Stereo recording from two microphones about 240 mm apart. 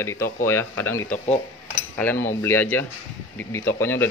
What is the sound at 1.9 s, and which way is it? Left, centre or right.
A man's voice, centre.